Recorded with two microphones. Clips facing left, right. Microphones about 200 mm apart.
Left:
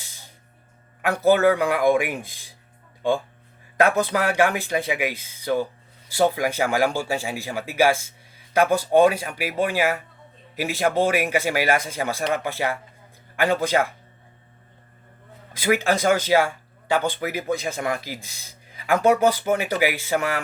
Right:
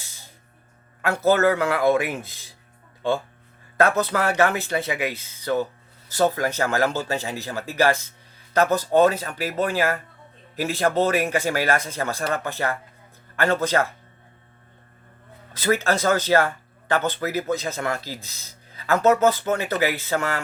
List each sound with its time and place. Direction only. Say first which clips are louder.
0.0 s music: left 1 dB; 15° left (ahead or behind)
1.0 s speech: left 1 dB; 15° left (ahead or behind)
3.8 s speech: left 1 dB; 15° left (ahead or behind)
15.5 s speech: left 1 dB; 10° left (ahead or behind)